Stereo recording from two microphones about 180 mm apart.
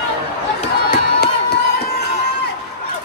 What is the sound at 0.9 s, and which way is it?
Crowd, 60° left (ahead or behind).